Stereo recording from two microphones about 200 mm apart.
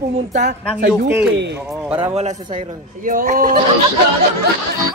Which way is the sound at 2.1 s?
30° right (ahead or behind).